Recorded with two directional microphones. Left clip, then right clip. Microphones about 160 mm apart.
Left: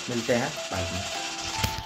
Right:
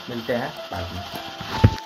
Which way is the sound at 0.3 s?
15° left (ahead or behind).